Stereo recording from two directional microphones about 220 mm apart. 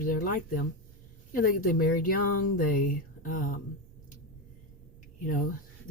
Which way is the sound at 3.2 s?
35° left (ahead or behind).